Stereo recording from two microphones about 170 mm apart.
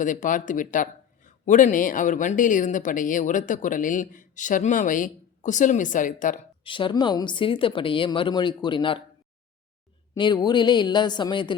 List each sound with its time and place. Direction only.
0.0 s speech: 50° left (ahead or behind)
6.7 s speech: 30° left (ahead or behind)
10.2 s speech: 25° left (ahead or behind)